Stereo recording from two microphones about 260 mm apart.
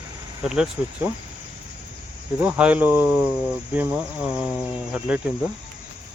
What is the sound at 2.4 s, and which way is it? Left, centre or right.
Speech, centre.